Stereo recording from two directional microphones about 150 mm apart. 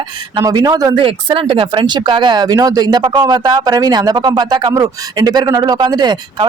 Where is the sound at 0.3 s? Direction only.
25° right (ahead or behind).